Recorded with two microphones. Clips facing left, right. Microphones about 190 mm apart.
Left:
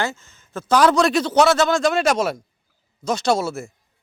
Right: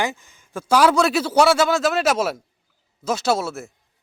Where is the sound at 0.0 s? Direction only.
15° right (ahead or behind).